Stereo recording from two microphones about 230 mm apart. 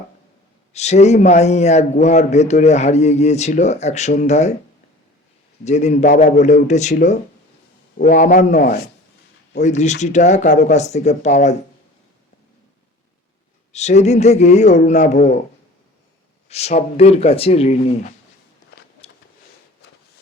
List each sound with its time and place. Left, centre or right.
0.7 s a man's voice: left
5.6 s speech: left
13.7 s a man's voice: left
16.5 s a man's voice: left
19.0 s a sound: left